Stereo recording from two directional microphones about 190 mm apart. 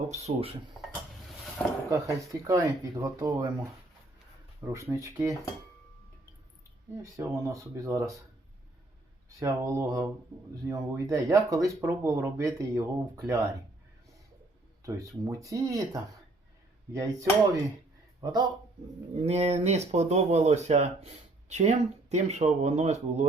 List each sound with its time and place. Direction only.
0.1 s speech: 35° right (ahead or behind)
1.9 s speech: 20° right (ahead or behind)
7.0 s speech: 15° right (ahead or behind)
9.4 s speech: 15° right (ahead or behind)
14.8 s speech: 15° right (ahead or behind)
19.2 s speech: 35° right (ahead or behind)